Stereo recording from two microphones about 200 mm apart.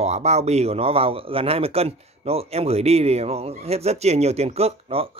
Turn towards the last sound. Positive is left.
turn(degrees=-30)  # may be behind; listen again after turning